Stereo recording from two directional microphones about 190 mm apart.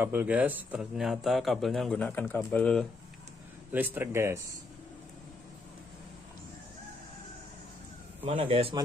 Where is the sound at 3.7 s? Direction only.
10° right (ahead or behind).